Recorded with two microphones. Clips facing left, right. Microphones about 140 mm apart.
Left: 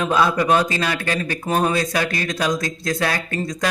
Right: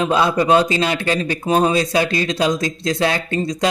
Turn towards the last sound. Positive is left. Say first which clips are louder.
# right 4 dB
turn(degrees=-25)  # may be behind; listen again after turning